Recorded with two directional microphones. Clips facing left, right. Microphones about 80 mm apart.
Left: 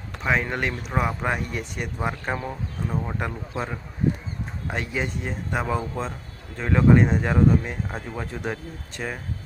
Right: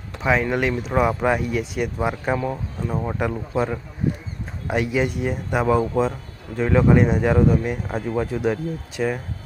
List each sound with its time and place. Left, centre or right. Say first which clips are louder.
0.2 s speech: right 4 dB; centre
2.5 s speech: right 3 dB; right
3.2 s speech: right 7 dB; centre
4.7 s speech: right 7 dB; centre